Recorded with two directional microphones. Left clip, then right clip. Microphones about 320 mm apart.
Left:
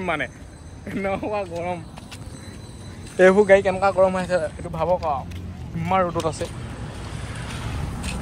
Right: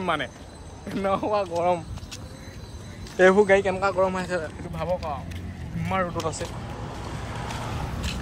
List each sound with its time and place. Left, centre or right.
0.0 s speech: centre
3.2 s speech: centre
7.0 s vehicle: right